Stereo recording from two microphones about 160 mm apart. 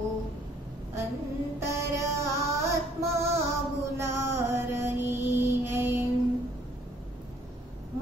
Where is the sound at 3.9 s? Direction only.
15° right (ahead or behind).